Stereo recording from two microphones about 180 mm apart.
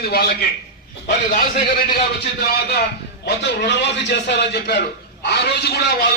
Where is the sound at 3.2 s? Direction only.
75° left (ahead or behind).